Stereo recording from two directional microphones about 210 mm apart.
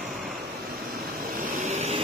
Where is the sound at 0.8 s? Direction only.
45° right (ahead or behind).